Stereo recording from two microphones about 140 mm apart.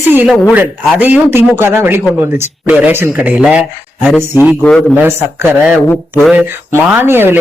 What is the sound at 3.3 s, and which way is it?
Speech, 5° right (ahead or behind).